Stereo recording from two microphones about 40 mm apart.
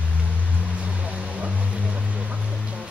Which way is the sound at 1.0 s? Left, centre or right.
Right.